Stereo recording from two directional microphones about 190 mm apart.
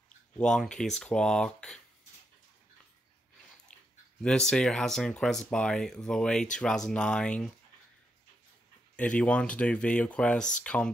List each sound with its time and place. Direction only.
0.4 s speech: 5° left (ahead or behind)
4.2 s speech: 5° left (ahead or behind)
8.9 s speech: 5° left (ahead or behind)